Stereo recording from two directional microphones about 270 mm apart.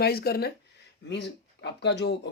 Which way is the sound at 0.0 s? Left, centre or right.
Left.